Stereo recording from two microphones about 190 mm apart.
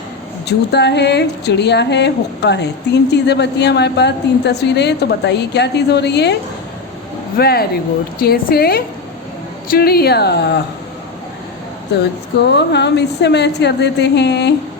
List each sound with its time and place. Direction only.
0.4 s speech: 60° left (ahead or behind)
7.3 s speech: 55° left (ahead or behind)
12.5 s speech: 65° left (ahead or behind)